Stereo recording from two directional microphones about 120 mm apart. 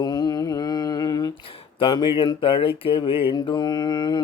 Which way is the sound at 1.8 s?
45° left (ahead or behind).